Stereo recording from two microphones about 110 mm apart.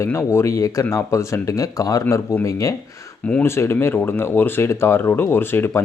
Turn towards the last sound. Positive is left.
turn(degrees=20)  # may be behind; listen again after turning